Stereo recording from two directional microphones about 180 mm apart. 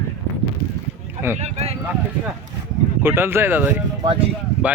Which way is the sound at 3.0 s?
15° right (ahead or behind).